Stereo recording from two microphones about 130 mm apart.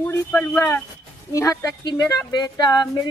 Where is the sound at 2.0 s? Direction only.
30° left (ahead or behind).